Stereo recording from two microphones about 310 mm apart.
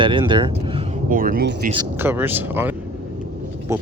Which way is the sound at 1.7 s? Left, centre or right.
Centre.